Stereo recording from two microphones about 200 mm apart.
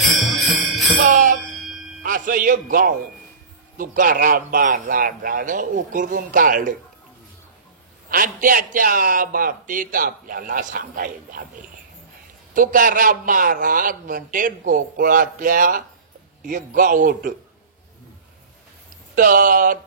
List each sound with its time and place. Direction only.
0.0 s jingle bell: centre (ahead or behind)
0.9 s music: 40° right (ahead or behind)
2.0 s speech: 40° right (ahead or behind)
8.1 s speech: 45° right (ahead or behind)
19.1 s speech: 45° right (ahead or behind)